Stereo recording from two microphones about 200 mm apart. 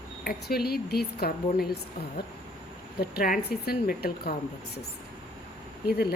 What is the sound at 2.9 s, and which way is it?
Speech, 45° left (ahead or behind).